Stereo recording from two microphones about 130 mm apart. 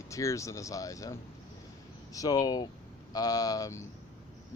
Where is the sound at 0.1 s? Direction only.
25° left (ahead or behind).